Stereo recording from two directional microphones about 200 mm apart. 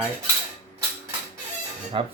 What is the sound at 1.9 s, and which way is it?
Speech, 25° right (ahead or behind).